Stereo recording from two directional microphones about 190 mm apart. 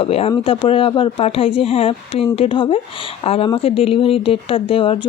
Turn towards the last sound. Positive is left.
turn(degrees=30)  # may be behind; listen again after turning